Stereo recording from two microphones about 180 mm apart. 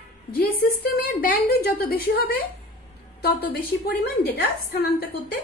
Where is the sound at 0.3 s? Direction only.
60° left (ahead or behind).